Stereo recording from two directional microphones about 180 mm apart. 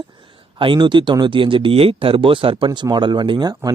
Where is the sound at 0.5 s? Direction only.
25° right (ahead or behind).